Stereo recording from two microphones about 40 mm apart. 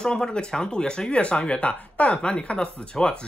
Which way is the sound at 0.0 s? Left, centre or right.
Centre.